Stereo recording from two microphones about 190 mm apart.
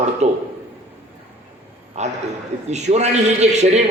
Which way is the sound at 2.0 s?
35° right (ahead or behind).